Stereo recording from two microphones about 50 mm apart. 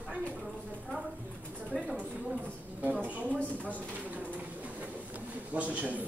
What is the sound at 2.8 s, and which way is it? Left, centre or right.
Speech, right.